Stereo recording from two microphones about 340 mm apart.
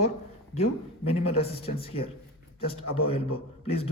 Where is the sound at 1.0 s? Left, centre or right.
Centre.